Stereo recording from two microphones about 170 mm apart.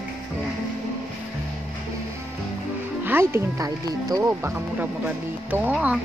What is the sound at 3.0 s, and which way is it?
Speech, 15° right (ahead or behind).